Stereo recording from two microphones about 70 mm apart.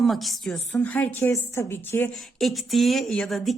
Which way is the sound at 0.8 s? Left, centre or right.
Left.